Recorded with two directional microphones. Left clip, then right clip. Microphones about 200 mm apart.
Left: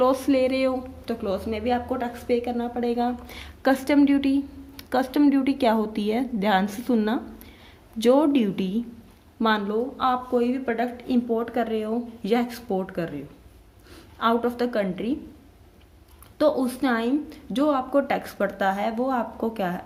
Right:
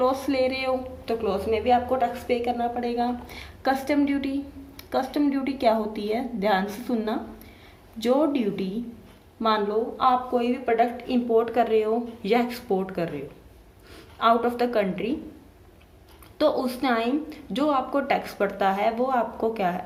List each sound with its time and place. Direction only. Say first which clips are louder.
0.0 s a woman's voice: left 2 dB; 50° left (ahead or behind)
16.4 s a woman's voice: left 1 dB; 35° left (ahead or behind)